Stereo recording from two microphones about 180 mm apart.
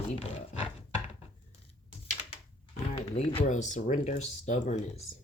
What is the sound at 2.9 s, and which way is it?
Speech, 35° left (ahead or behind).